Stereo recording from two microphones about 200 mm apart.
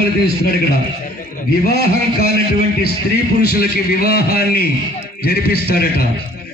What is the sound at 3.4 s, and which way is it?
A man's voice, 50° left (ahead or behind).